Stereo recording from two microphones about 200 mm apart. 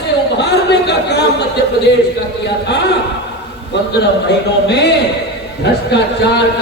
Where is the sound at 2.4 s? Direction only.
60° left (ahead or behind).